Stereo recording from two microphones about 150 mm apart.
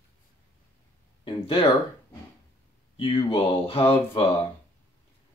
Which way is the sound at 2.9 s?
35° left (ahead or behind).